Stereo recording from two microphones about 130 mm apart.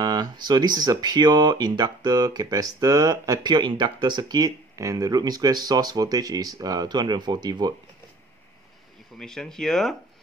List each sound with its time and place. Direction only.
0.0 s speech: 30° right (ahead or behind)
9.2 s speech: 5° left (ahead or behind)